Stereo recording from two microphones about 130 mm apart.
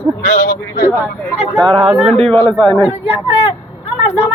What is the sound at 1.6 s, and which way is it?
Speech, 50° right (ahead or behind).